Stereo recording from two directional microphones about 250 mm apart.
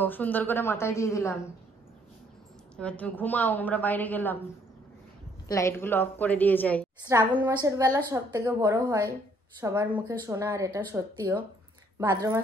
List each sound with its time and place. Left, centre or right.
0.0 s a woman's voice: centre
2.7 s a woman's voice: centre
5.5 s a woman's voice: centre
7.1 s a woman's voice: centre